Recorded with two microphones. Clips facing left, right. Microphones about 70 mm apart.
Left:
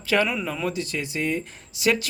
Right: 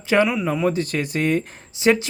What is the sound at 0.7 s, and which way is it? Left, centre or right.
Speech, right.